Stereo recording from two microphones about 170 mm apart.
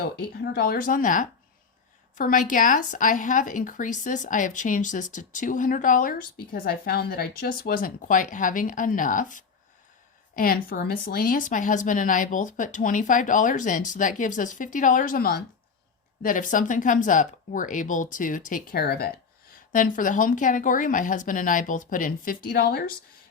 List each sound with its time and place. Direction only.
0.0 s a woman's voice: 70° left (ahead or behind)